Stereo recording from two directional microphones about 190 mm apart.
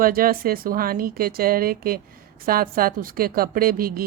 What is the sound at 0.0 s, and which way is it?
A woman's voice, 50° right (ahead or behind).